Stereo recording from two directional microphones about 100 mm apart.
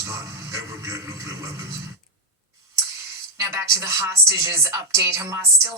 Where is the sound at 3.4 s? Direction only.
30° right (ahead or behind).